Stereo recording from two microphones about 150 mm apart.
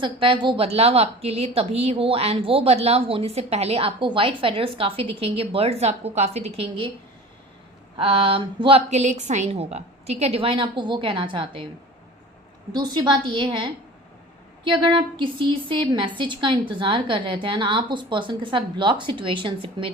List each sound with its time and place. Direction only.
0.0 s a woman's voice: 35° right (ahead or behind)
7.9 s a woman's voice: 35° right (ahead or behind)
8.9 s a woman's voice: 50° right (ahead or behind); by 11.6 s 35° right (ahead or behind)
12.7 s a woman's voice: 30° right (ahead or behind)